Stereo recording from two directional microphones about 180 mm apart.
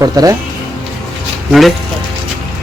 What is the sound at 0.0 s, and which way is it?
Speech, 20° right (ahead or behind).